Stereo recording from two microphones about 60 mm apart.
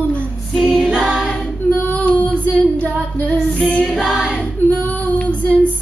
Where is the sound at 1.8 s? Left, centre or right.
Left.